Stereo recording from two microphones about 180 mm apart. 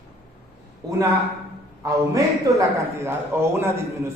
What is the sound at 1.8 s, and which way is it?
A man's voice, 15° right (ahead or behind).